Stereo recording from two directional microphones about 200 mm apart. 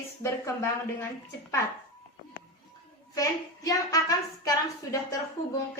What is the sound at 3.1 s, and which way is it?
Speech, 15° left (ahead or behind).